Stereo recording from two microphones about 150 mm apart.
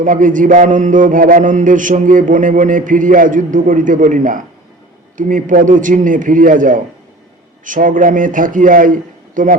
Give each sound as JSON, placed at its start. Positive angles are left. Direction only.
{"t": 0.0, "sound": "mantra", "side_deg": -60}